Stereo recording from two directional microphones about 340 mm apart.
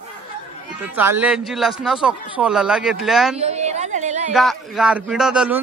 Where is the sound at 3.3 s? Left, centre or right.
Centre.